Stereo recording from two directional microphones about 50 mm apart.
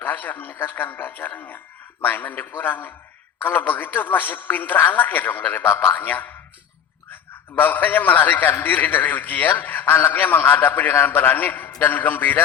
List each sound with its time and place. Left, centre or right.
0.0 s a man's voice: left